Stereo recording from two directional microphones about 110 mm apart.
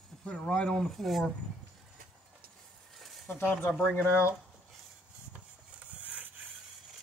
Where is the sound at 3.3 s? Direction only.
20° left (ahead or behind).